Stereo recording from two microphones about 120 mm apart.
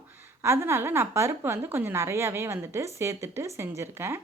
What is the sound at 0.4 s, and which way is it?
Speech, 20° right (ahead or behind).